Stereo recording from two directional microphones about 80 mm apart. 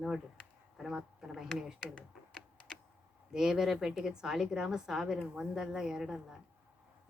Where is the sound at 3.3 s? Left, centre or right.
Centre.